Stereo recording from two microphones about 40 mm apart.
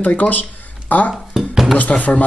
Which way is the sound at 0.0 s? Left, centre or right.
Left.